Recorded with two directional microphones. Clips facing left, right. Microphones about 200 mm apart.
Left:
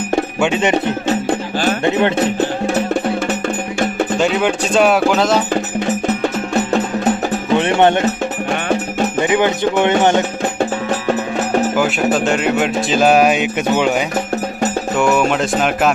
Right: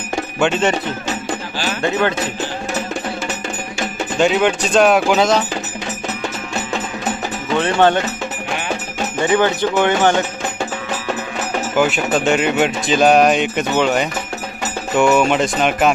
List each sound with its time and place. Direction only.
0.3 s music: 10° left (ahead or behind)
1.0 s music: 55° left (ahead or behind)
1.8 s speech: 25° left (ahead or behind)
2.1 s music: 60° left (ahead or behind)
4.2 s speech: centre (ahead or behind)
5.8 s music: 55° left (ahead or behind)
7.5 s speech: 20° left (ahead or behind)
9.2 s speech: 15° left (ahead or behind)
12.1 s speech: centre (ahead or behind)